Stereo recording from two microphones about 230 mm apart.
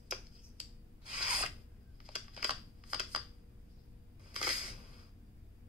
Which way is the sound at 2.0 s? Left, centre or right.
Centre.